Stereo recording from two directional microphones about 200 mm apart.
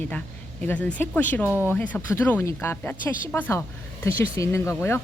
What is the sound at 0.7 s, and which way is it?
Speech, 5° left (ahead or behind).